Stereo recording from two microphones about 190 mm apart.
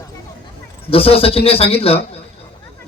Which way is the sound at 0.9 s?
30° left (ahead or behind).